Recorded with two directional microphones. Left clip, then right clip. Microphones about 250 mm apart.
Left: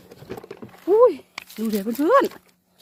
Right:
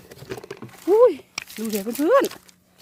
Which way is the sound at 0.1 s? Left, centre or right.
Right.